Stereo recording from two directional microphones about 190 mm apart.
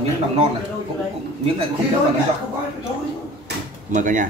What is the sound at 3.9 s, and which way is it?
Speech, 40° right (ahead or behind).